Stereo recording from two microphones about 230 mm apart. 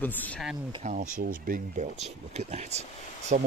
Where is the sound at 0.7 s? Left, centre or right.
Right.